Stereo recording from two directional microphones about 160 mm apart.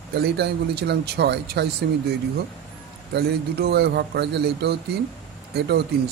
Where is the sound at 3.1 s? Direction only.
90° right.